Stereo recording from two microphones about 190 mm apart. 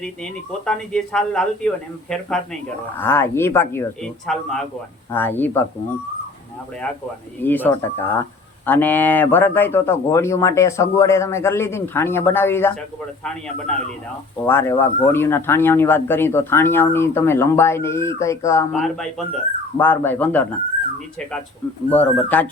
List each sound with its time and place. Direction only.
0.0 s speech: 5° left (ahead or behind)
3.0 s speech: 15° left (ahead or behind)
4.3 s speech: centre (ahead or behind)
7.4 s speech: 10° left (ahead or behind)
14.4 s speech: 10° left (ahead or behind)
18.7 s speech: centre (ahead or behind)
21.8 s speech: 10° left (ahead or behind)